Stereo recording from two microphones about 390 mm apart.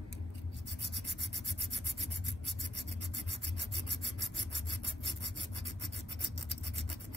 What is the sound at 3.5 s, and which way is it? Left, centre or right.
Rub, right.